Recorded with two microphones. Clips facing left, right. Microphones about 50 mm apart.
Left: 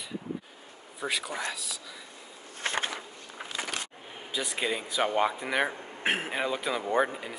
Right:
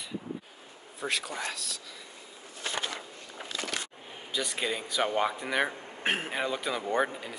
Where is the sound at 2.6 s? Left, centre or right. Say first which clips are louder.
Left 3 dB; left.